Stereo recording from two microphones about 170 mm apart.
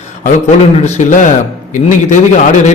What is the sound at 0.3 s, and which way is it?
A man's voice, 45° left (ahead or behind).